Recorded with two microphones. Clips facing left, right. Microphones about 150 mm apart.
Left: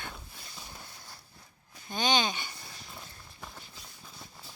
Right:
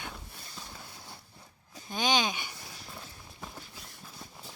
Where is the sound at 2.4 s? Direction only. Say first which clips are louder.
Right 1 dB; 10° right (ahead or behind).